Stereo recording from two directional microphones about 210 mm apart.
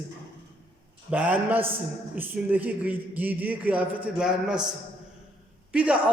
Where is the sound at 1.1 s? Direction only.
5° right (ahead or behind).